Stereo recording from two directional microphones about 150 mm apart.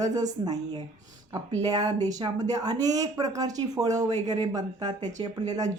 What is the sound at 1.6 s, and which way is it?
Speech, 25° right (ahead or behind).